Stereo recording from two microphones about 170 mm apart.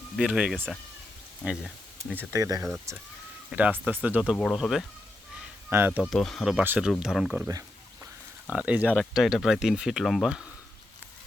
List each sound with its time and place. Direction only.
0.2 s speech: 5° right (ahead or behind)
2.3 s speech: 20° right (ahead or behind)
4.4 s speech: 5° left (ahead or behind); by 6.1 s 10° right (ahead or behind)
6.1 s speech: centre (ahead or behind)
8.4 s speech: 10° right (ahead or behind)
8.9 s speech: 5° left (ahead or behind)